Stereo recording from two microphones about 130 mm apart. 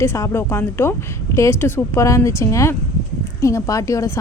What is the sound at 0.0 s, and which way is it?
Speech, 20° left (ahead or behind).